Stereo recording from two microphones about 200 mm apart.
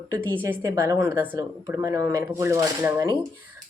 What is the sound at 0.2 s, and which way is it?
Speech, 10° left (ahead or behind).